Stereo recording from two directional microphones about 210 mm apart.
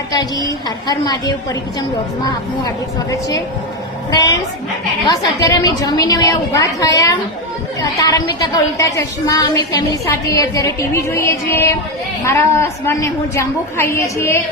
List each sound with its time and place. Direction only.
0.1 s a woman's voice: 20° left (ahead or behind)